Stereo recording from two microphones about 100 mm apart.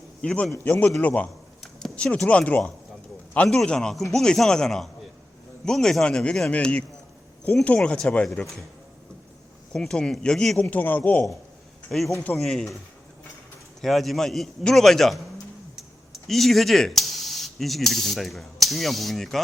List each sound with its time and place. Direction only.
0.2 s a man's voice: 5° left (ahead or behind)
9.7 s a man's voice: 5° left (ahead or behind)
10.7 s a man's voice: 15° left (ahead or behind)
13.8 s a man's voice: centre (ahead or behind)